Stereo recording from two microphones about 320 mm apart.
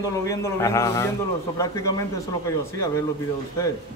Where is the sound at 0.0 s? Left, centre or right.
Centre.